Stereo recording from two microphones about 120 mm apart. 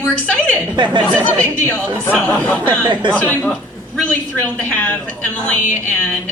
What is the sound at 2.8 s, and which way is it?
Speech, 40° right (ahead or behind).